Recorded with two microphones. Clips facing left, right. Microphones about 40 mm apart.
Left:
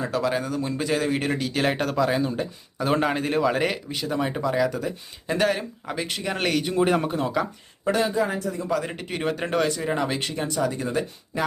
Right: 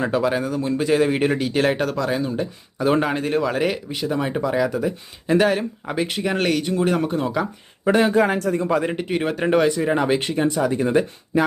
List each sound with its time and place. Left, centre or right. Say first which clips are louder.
0.1 s speech: right 4 dB; centre
8.1 s speech: right 6 dB; right
8.9 s speech: right 5 dB; centre